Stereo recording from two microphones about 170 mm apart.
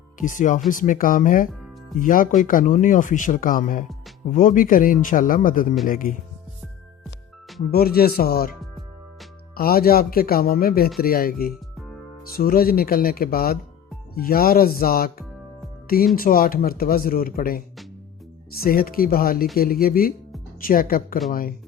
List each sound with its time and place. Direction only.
0.2 s speech: 50° left (ahead or behind)
7.7 s speech: 65° left (ahead or behind)
9.6 s speech: 60° left (ahead or behind)
16.1 s speech: 60° left (ahead or behind)